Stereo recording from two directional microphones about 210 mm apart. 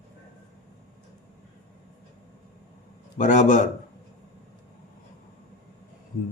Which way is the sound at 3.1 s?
35° left (ahead or behind).